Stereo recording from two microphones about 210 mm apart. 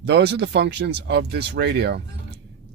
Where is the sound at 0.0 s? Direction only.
50° right (ahead or behind).